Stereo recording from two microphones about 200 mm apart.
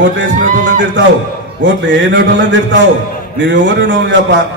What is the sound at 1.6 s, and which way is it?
A man's voice, 65° right (ahead or behind).